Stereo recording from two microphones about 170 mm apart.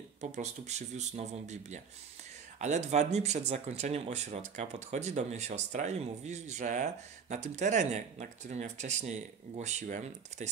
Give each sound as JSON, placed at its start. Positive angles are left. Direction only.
{"t": 0.2, "sound": "speech", "side_deg": -40}